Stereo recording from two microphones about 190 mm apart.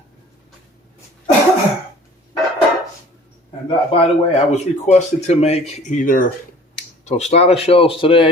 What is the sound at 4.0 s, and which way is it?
Speech, 35° left (ahead or behind).